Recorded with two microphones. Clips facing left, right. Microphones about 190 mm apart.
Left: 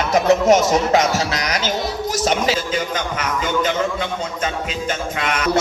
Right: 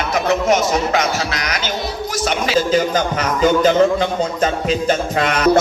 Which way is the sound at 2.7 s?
35° right (ahead or behind).